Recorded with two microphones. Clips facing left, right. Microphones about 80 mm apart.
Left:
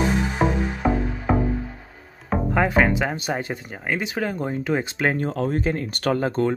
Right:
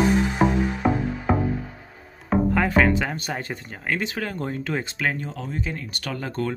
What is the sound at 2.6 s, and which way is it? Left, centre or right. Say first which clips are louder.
Speech: left 1 dB; centre.